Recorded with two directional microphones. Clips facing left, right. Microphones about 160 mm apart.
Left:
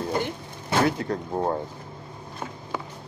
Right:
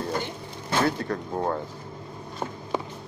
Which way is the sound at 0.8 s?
20° left (ahead or behind).